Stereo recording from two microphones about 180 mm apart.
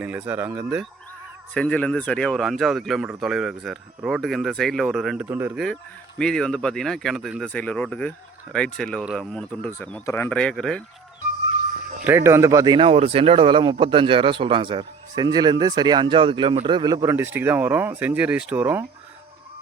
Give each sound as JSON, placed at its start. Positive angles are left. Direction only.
{"t": 0.0, "sound": "speech", "side_deg": -10}
{"t": 1.5, "sound": "speech", "side_deg": 5}
{"t": 6.1, "sound": "speech", "side_deg": 5}
{"t": 12.0, "sound": "a man's voice", "side_deg": -15}